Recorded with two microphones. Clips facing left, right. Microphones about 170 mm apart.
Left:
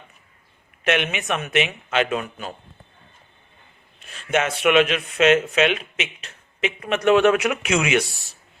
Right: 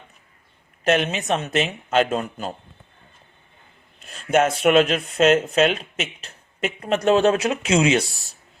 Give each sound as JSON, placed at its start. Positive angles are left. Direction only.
{"t": 0.9, "sound": "speech", "side_deg": -35}
{"t": 4.1, "sound": "speech", "side_deg": -40}